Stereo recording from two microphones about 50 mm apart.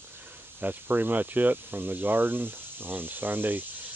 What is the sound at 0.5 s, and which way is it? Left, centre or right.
Speech, right.